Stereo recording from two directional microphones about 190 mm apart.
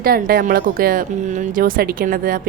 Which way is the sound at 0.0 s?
50° right (ahead or behind).